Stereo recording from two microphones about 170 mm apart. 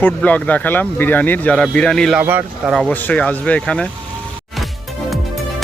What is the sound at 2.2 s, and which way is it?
Speech, 10° right (ahead or behind).